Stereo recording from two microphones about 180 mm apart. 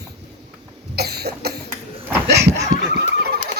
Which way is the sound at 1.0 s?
65° right (ahead or behind).